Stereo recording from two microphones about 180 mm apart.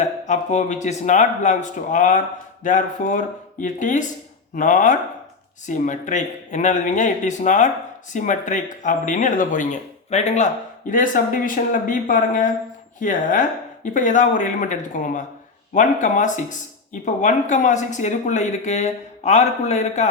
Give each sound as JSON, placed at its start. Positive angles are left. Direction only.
{"t": 0.0, "sound": "speech", "side_deg": 40}